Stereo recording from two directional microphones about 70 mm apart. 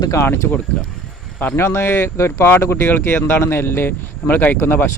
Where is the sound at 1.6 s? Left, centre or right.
Left.